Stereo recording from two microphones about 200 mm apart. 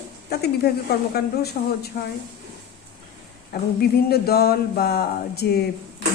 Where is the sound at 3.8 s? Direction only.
50° left (ahead or behind).